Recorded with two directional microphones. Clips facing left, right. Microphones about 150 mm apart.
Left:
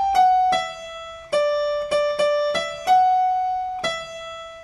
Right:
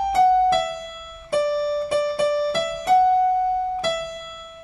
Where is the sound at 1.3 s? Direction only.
25° right (ahead or behind).